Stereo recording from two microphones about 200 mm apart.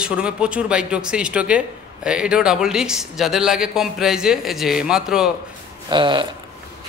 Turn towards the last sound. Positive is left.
turn(degrees=-25)  # may be behind; listen again after turning